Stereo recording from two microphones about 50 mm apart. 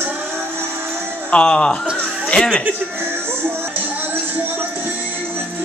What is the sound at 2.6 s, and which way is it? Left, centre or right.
Speech, right.